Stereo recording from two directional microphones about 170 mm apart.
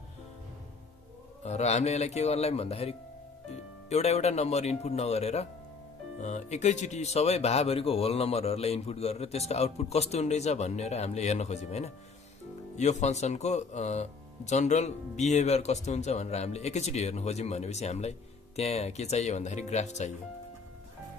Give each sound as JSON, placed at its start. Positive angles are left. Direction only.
{"t": 1.4, "sound": "speech", "side_deg": 40}